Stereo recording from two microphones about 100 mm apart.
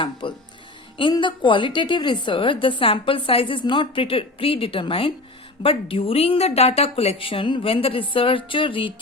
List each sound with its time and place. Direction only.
0.0 s a woman's voice: 55° left (ahead or behind)